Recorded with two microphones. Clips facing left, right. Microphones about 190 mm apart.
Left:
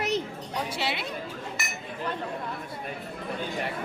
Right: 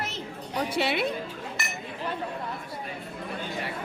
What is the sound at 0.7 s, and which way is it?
Speech, 55° right (ahead or behind).